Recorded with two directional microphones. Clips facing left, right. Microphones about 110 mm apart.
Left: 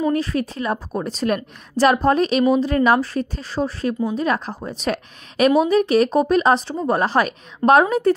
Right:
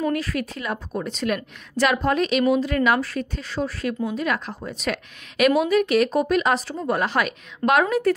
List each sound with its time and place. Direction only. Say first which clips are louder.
0.1 s a woman's voice: left 4 dB; 30° left (ahead or behind)